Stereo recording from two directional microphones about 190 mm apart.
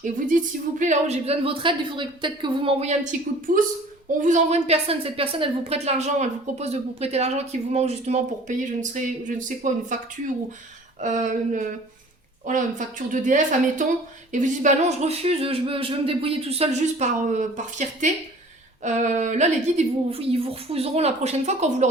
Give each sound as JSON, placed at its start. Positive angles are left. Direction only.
{"t": 0.3, "sound": "speech", "side_deg": -45}
{"t": 3.0, "sound": "a woman's voice", "side_deg": -40}
{"t": 11.0, "sound": "a woman's voice", "side_deg": -40}